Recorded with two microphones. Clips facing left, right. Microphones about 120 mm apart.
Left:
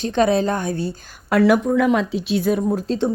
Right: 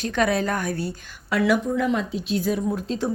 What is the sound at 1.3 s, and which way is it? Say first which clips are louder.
Speech: left 6 dB; 50° left (ahead or behind).